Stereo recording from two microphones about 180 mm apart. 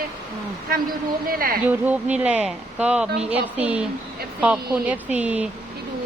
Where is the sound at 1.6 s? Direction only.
10° right (ahead or behind).